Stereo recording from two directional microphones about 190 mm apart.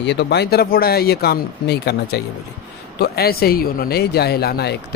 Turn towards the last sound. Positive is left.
turn(degrees=55)  # may be behind; listen again after turning